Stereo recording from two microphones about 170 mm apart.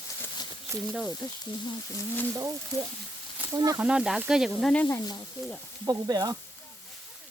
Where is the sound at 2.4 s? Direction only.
20° right (ahead or behind).